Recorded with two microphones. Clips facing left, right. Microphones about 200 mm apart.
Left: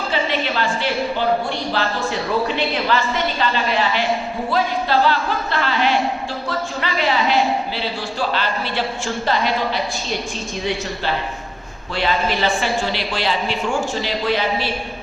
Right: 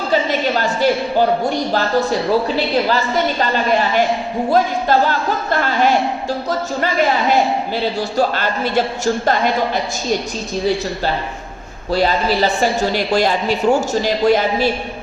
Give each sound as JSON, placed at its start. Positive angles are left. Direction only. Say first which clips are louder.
{"t": 0.1, "sound": "a sound", "louder": "right 6 dB", "side_deg": -40}
{"t": 2.6, "sound": "a woman's voice", "louder": "right 3 dB", "side_deg": -40}
{"t": 11.9, "sound": "a woman's voice", "louder": "right 5 dB", "side_deg": -40}